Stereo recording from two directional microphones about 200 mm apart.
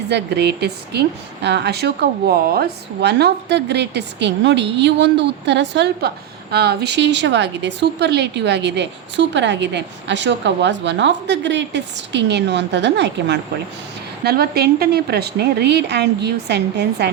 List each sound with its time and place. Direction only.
0.1 s a woman's voice: 55° right (ahead or behind)